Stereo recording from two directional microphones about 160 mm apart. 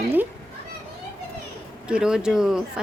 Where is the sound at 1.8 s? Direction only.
5° right (ahead or behind).